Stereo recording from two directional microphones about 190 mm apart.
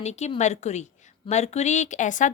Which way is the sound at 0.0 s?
35° left (ahead or behind).